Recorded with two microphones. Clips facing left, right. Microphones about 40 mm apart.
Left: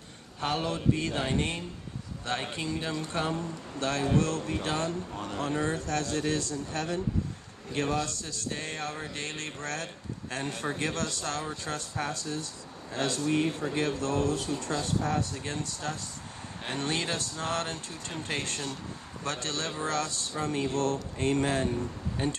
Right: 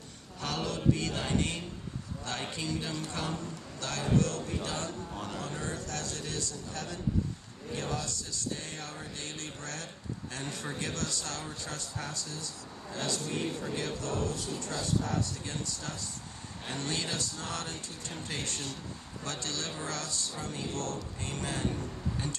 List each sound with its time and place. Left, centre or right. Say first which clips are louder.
0.4 s mantra: left 4 dB; left
2.5 s speech: left 3 dB; left
5.1 s speech: left 2 dB; centre
5.4 s speech: left 7 dB; left
7.7 s a sound: left 6 dB; left
10.3 s speech: left 7 dB; left